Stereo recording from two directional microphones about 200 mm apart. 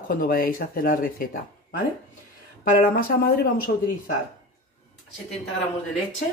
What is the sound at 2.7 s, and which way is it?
Speech, 45° left (ahead or behind).